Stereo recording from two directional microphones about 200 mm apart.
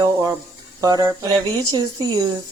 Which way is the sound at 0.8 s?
20° right (ahead or behind).